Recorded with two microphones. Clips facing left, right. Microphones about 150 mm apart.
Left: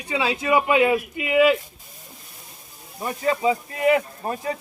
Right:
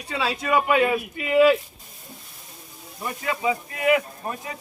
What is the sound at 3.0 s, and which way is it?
Speech, 30° left (ahead or behind).